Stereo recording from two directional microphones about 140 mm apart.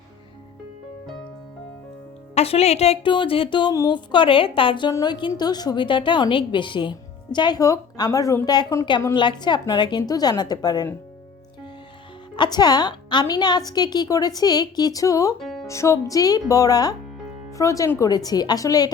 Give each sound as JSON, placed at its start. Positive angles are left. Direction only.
{"t": 2.3, "sound": "a woman's voice", "side_deg": 45}
{"t": 12.4, "sound": "a woman's voice", "side_deg": 30}
{"t": 15.4, "sound": "music", "side_deg": 0}
{"t": 15.6, "sound": "a woman's voice", "side_deg": 20}